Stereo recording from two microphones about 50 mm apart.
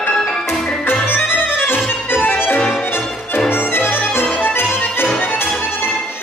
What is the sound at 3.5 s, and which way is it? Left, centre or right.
Music, left.